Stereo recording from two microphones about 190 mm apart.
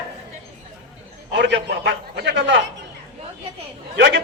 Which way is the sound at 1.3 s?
65° right (ahead or behind).